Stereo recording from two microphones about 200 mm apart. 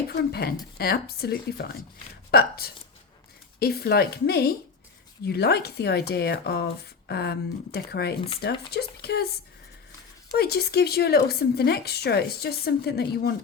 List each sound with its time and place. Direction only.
0.2 s speech: 50° left (ahead or behind)
10.3 s speech: 50° left (ahead or behind)